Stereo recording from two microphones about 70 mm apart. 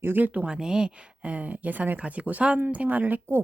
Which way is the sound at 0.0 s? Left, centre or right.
Right.